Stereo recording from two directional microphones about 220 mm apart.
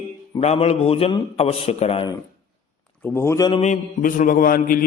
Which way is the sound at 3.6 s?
35° left (ahead or behind).